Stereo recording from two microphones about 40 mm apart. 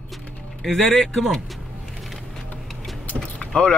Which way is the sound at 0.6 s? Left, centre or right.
Centre.